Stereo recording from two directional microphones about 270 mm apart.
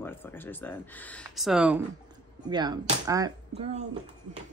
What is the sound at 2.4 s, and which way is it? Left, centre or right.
Speech, centre.